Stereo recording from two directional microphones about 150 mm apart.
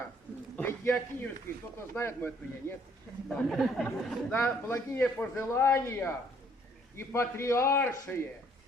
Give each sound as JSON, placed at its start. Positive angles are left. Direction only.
{"t": 0.5, "sound": "a man's voice", "side_deg": 15}
{"t": 3.2, "sound": "speech", "side_deg": 0}
{"t": 3.8, "sound": "a man's voice", "side_deg": 15}